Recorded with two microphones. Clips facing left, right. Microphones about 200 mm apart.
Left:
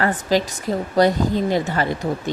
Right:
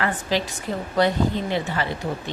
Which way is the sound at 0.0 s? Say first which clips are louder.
Left 5 dB; 40° left (ahead or behind).